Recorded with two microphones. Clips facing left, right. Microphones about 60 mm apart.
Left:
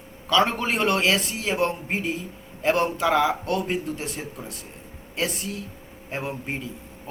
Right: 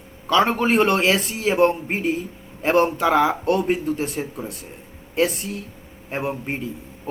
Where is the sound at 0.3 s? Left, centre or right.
Centre.